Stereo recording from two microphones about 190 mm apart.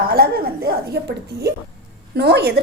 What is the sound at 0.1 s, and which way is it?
A woman's voice, 50° right (ahead or behind).